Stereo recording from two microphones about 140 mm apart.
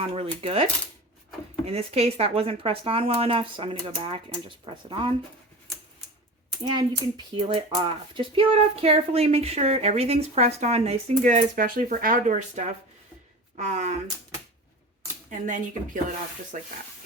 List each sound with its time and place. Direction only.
0.0 s speech: 45° right (ahead or behind)
6.7 s speech: 30° right (ahead or behind); by 14.0 s 55° right (ahead or behind)
15.3 s speech: 65° right (ahead or behind)